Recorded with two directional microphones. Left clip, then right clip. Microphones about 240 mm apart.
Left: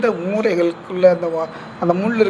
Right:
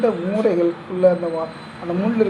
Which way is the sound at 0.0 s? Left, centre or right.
Left.